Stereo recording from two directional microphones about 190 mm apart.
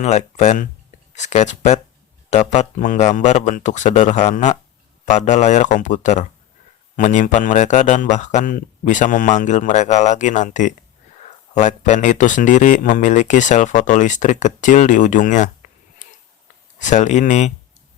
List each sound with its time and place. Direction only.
0.0 s speech: 35° left (ahead or behind)
16.8 s speech: 40° left (ahead or behind)